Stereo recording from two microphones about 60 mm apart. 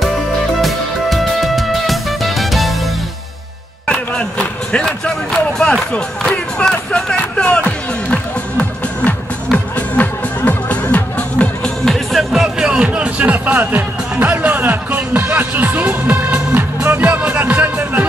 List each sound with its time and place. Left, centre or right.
0.6 s music: centre
3.8 s a sound: centre
5.7 s speech: centre
6.6 s music: centre
11.6 s music: centre
12.3 s music: centre; by 18.0 s right